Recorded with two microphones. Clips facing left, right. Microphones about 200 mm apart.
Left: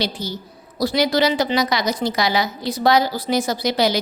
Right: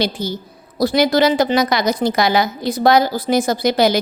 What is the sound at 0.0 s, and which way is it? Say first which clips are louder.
A woman's voice: right 4 dB; 50° right (ahead or behind).